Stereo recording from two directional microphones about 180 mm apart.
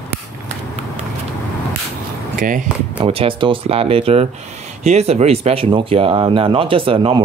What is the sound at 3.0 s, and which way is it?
Speech, 30° right (ahead or behind).